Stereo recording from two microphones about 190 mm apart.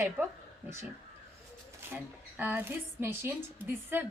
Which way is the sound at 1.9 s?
10° right (ahead or behind).